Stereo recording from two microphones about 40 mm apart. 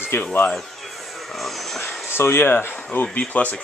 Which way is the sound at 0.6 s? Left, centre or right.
Centre.